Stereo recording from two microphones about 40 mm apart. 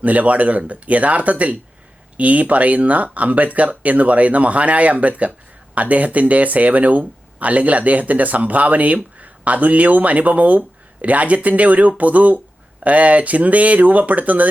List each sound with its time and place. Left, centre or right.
0.0 s speech: right